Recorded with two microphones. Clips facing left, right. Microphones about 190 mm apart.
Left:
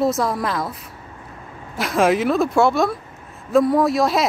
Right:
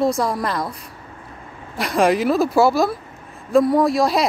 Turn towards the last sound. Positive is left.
turn(degrees=0)  # may be behind; listen again after turning